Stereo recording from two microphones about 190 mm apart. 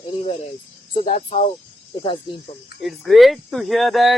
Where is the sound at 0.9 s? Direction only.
40° left (ahead or behind).